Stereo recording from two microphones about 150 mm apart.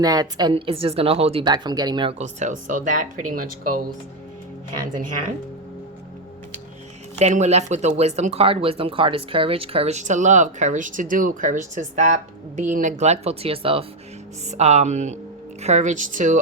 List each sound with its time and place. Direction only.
0.0 s speech: 25° right (ahead or behind)
2.1 s speech: 50° right (ahead or behind)
7.2 s speech: 50° right (ahead or behind)